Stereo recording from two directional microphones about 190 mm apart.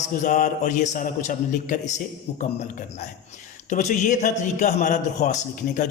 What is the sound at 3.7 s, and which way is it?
A man's voice, 40° left (ahead or behind).